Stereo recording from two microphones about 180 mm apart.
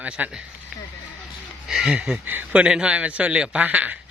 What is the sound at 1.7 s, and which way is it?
Speech, 5° right (ahead or behind).